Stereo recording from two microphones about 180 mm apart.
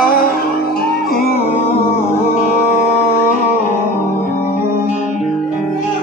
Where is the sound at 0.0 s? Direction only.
55° left (ahead or behind).